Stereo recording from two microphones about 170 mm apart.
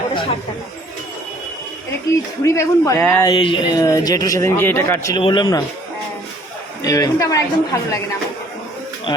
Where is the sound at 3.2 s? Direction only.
30° left (ahead or behind).